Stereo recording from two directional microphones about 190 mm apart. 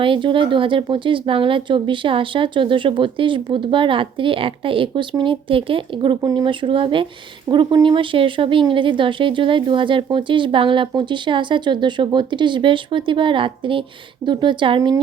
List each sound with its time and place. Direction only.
0.0 s speech: 25° right (ahead or behind)